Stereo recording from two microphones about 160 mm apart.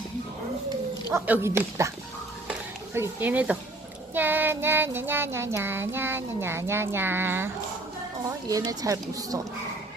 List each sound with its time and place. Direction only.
1.1 s child singing: 15° right (ahead or behind)
2.9 s child singing: 15° right (ahead or behind)
8.3 s speech: 20° right (ahead or behind)